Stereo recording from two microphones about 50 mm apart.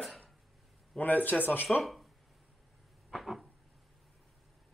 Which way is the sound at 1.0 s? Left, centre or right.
Left.